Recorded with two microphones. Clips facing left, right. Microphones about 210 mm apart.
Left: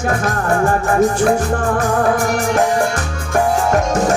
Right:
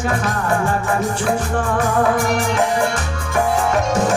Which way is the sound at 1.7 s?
45° left (ahead or behind).